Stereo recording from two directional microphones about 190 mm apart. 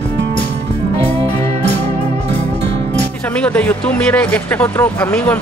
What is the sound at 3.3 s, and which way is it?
Speech, 5° left (ahead or behind).